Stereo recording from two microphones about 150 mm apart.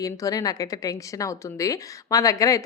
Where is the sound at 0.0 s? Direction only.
25° left (ahead or behind).